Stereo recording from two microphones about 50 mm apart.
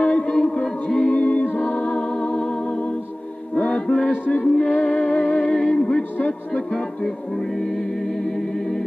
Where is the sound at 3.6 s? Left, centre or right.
Left.